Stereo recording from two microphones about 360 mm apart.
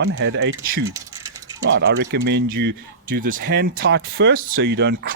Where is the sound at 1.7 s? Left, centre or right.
Right.